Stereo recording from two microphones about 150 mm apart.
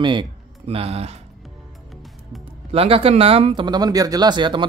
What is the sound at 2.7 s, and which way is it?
Speech, 40° right (ahead or behind).